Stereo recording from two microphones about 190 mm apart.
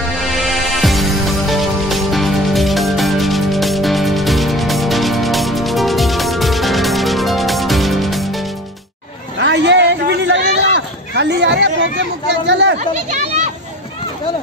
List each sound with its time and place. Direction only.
0.2 s music: centre (ahead or behind)
9.4 s a sound: 65° right (ahead or behind)
12.7 s chatter: 35° right (ahead or behind)